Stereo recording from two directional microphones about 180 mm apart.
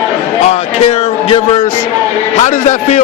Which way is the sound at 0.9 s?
35° left (ahead or behind).